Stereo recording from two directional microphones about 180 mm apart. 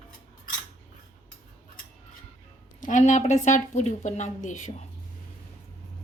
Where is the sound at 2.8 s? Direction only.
45° left (ahead or behind).